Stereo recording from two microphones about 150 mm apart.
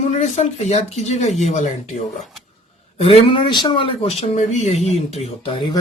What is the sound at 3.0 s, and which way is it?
Speech, 40° left (ahead or behind).